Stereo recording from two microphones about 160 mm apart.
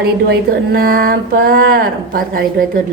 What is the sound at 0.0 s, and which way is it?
Speech, 80° right.